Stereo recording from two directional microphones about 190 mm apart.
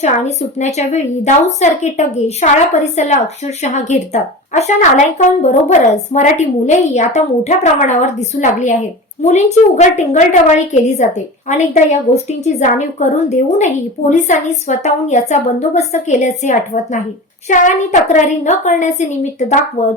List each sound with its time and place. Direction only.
0.0 s a woman's voice: 35° left (ahead or behind)